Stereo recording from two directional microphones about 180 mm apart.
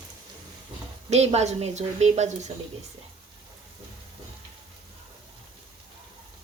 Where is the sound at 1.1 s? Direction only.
35° right (ahead or behind).